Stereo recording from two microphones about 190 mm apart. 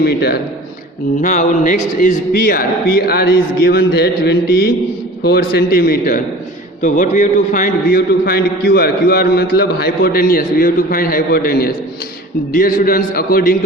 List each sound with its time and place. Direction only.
0.0 s a man's voice: 55° left (ahead or behind)
1.2 s a man's voice: 45° left (ahead or behind)
6.8 s a man's voice: 40° left (ahead or behind)